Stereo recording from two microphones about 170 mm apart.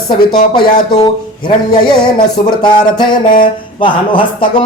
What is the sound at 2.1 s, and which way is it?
A man's voice, 25° left (ahead or behind).